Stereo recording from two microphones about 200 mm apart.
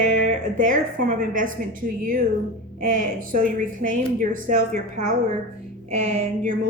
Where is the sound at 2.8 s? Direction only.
45° right (ahead or behind).